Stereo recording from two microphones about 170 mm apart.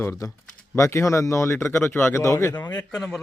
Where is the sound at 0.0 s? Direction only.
15° left (ahead or behind).